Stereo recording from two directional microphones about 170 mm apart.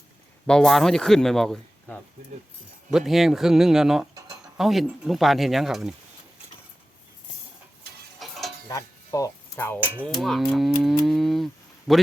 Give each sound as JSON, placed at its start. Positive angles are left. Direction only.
{"t": 0.4, "sound": "speech", "side_deg": 5}
{"t": 3.1, "sound": "speech", "side_deg": 0}
{"t": 8.2, "sound": "stir", "side_deg": 0}
{"t": 8.7, "sound": "cutlery", "side_deg": 20}
{"t": 9.8, "sound": "a sound", "side_deg": -10}
{"t": 10.2, "sound": "speech", "side_deg": 0}